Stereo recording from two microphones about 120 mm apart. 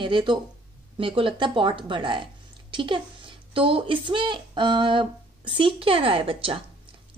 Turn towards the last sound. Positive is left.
turn(degrees=-50)  # may be behind; listen again after turning